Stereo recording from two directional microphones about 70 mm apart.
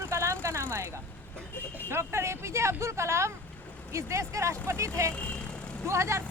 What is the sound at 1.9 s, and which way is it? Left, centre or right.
Speech, right.